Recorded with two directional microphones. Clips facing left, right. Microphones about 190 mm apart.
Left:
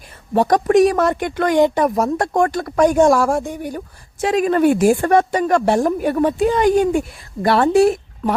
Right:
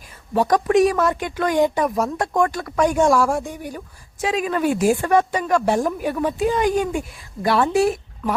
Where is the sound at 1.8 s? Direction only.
45° left (ahead or behind).